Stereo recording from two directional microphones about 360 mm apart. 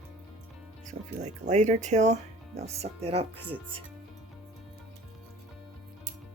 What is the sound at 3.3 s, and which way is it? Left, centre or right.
Speech, centre.